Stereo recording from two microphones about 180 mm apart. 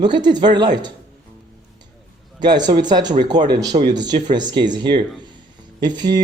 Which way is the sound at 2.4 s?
25° right (ahead or behind).